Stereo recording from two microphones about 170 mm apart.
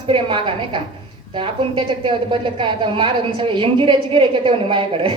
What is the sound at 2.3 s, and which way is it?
A woman's voice, 30° right (ahead or behind).